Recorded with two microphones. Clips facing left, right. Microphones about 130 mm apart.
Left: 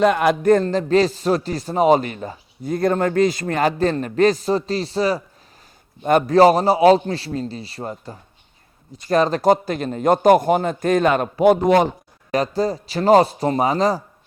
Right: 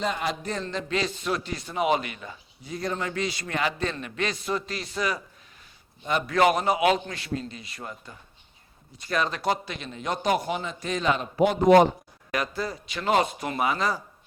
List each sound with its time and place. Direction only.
0.0 s a man's voice: 60° left (ahead or behind); by 5.2 s 30° left (ahead or behind)
6.0 s a man's voice: 50° left (ahead or behind)
6.3 s a man's voice: 35° left (ahead or behind); by 11.6 s 50° left (ahead or behind)
12.3 s a man's voice: 35° left (ahead or behind)